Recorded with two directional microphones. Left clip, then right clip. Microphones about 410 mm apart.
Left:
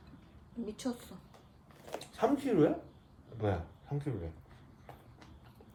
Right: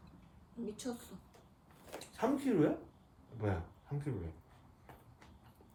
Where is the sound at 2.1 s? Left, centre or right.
Centre.